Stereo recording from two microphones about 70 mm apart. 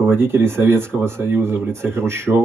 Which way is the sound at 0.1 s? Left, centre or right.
Right.